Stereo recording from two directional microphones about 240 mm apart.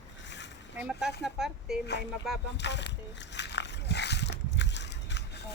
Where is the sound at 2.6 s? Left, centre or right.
Left.